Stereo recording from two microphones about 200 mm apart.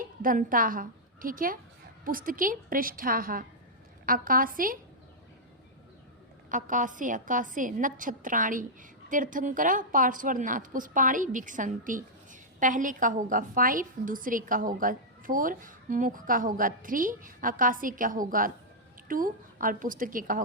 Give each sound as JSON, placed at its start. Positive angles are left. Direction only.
{"t": 0.0, "sound": "a woman's voice", "side_deg": -45}
{"t": 6.5, "sound": "a woman's voice", "side_deg": -40}